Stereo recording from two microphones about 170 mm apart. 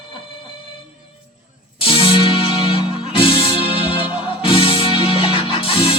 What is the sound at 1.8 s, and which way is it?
Music, 35° left (ahead or behind).